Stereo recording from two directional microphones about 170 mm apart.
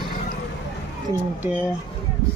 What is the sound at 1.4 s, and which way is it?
Speech, 10° right (ahead or behind).